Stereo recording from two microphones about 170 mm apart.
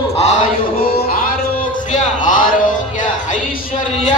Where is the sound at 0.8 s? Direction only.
60° left (ahead or behind).